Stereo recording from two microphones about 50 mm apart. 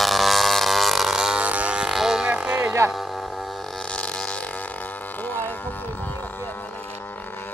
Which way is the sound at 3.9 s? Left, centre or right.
Left.